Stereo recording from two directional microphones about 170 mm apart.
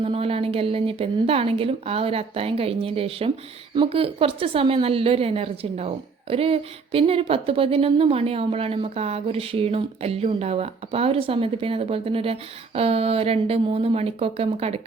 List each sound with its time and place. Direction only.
0.0 s a woman's voice: 35° right (ahead or behind)